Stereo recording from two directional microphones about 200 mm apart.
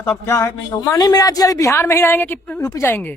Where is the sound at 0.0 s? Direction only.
15° left (ahead or behind).